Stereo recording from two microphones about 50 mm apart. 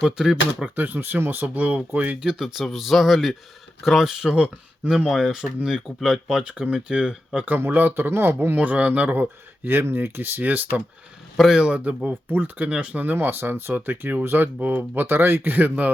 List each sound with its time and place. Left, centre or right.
0.0 s speech: centre
0.8 s speech: right
2.4 s a man's voice: centre
7.3 s speech: right
8.6 s speech: right
9.6 s speech: right
11.5 s speech: centre
12.0 s speech: right
13.0 s speech: right